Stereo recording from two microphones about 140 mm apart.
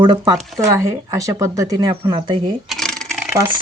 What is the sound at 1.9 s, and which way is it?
Speech, 40° right (ahead or behind).